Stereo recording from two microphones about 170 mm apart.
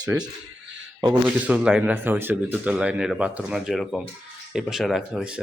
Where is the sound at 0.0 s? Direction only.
5° right (ahead or behind).